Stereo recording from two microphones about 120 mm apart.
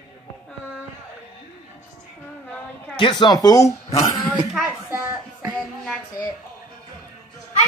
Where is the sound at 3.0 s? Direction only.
40° left (ahead or behind).